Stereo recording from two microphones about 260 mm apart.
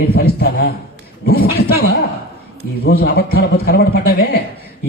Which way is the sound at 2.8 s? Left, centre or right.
Left.